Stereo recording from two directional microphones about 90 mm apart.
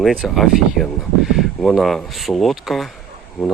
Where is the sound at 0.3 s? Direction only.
Centre (ahead or behind).